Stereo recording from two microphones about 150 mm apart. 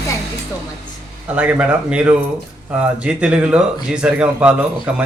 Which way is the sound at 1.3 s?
10° right (ahead or behind).